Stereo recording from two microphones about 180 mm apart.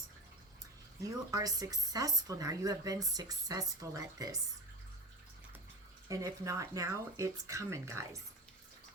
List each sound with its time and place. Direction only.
1.0 s speech: 20° right (ahead or behind)
6.1 s speech: 20° right (ahead or behind)